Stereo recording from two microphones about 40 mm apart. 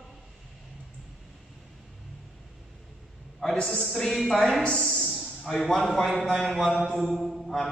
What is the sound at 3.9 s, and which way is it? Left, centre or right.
Speech, centre.